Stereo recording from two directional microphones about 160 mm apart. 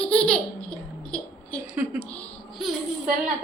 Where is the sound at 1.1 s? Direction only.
5° left (ahead or behind).